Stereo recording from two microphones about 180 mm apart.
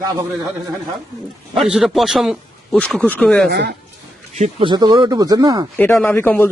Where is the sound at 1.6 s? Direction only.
Centre (ahead or behind).